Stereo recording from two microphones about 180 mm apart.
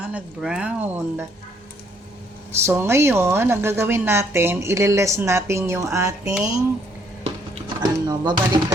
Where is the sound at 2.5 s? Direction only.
15° right (ahead or behind).